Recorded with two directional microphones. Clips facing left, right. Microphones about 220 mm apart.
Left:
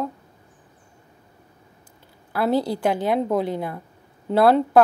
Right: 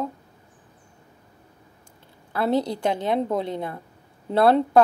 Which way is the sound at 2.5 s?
25° right (ahead or behind).